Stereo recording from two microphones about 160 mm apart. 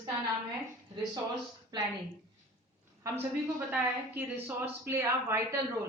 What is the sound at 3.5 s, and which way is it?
A woman's voice, 15° right (ahead or behind).